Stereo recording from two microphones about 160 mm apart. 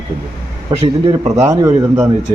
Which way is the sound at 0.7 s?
25° right (ahead or behind).